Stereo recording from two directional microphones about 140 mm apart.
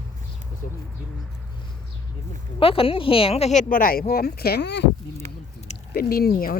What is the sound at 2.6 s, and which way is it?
Speech, 40° left (ahead or behind).